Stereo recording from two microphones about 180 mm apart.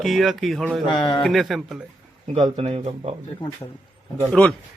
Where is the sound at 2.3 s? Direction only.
25° right (ahead or behind).